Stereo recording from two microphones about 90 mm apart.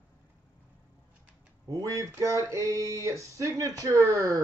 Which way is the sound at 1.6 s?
40° right (ahead or behind).